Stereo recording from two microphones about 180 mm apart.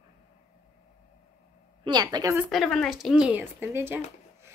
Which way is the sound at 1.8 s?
25° right (ahead or behind).